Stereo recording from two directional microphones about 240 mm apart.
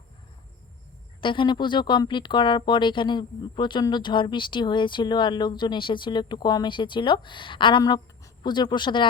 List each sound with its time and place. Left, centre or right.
1.2 s speech: centre